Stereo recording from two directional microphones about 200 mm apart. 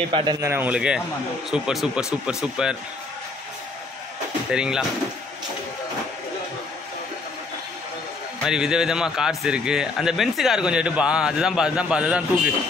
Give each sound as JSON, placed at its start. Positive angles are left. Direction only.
{"t": 0.1, "sound": "speech", "side_deg": -20}
{"t": 4.5, "sound": "speech", "side_deg": -5}
{"t": 8.5, "sound": "speech", "side_deg": -5}